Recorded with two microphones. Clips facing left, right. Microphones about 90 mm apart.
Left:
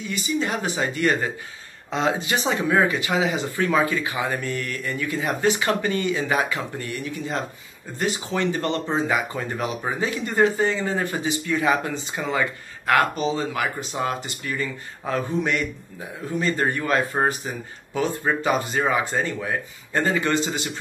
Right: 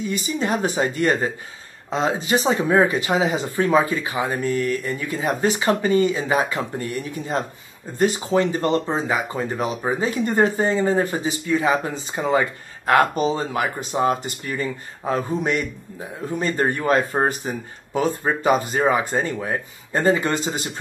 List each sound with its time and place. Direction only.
0.2 s speech: 35° right (ahead or behind)